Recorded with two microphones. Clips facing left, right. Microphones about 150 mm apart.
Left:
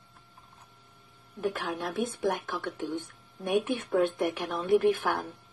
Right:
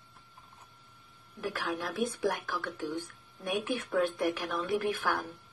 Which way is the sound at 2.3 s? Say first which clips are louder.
Left 3 dB; 25° left (ahead or behind).